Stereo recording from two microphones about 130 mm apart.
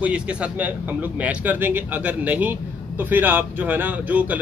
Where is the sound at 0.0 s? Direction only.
10° right (ahead or behind).